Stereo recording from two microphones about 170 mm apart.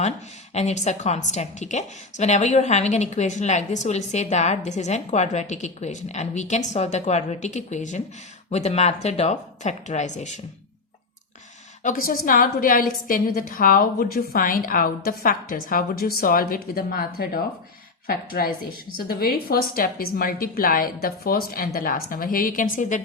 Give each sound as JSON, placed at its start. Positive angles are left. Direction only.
{"t": 0.5, "sound": "a woman's voice", "side_deg": 40}
{"t": 11.8, "sound": "a woman's voice", "side_deg": 50}